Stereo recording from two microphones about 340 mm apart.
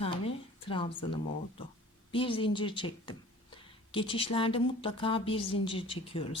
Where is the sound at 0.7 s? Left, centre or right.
Centre.